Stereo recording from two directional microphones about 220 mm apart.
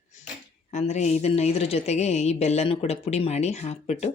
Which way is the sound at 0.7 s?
30° left (ahead or behind).